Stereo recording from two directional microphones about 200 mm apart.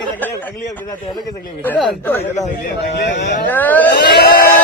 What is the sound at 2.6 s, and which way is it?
Speech, 55° left (ahead or behind).